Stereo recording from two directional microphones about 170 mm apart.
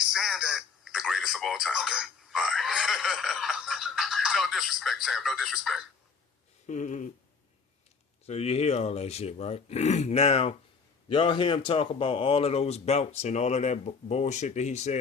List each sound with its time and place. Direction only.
0.0 s telephone: centre (ahead or behind)
6.7 s a sound: 45° left (ahead or behind)
8.3 s speech: 40° left (ahead or behind)